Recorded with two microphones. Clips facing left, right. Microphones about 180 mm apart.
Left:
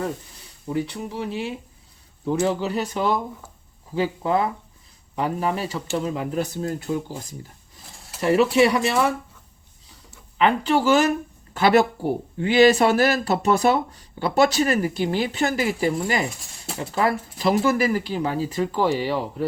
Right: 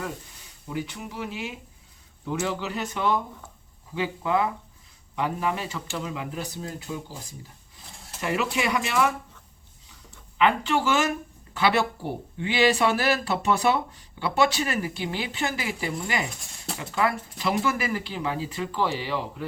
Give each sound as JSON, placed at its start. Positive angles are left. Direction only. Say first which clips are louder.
{"t": 0.7, "sound": "speech", "louder": "left 6 dB", "side_deg": 35}
{"t": 8.2, "sound": "speech", "louder": "left 9 dB", "side_deg": 35}
{"t": 10.3, "sound": "speech", "louder": "left 3 dB", "side_deg": 35}